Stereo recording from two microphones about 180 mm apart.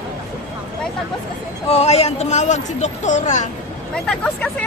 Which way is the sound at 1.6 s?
35° left (ahead or behind).